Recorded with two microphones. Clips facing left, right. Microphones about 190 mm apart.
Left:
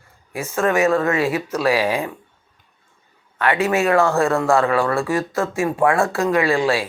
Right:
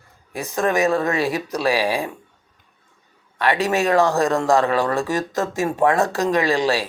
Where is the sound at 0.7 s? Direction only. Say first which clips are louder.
Left 2 dB; 35° right (ahead or behind).